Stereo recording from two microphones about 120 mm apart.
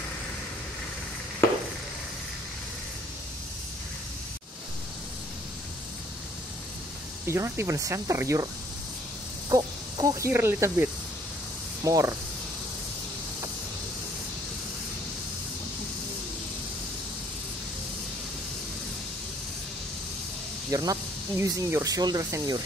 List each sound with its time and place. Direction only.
7.2 s speech: 20° right (ahead or behind)
9.5 s speech: 30° right (ahead or behind)
20.7 s speech: 30° right (ahead or behind)